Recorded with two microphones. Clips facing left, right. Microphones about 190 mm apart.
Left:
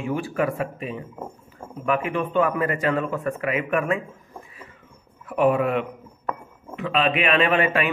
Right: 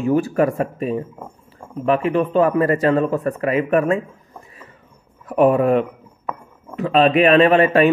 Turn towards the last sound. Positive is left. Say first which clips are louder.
# right 8 dB
turn(degrees=-40)  # may be behind; listen again after turning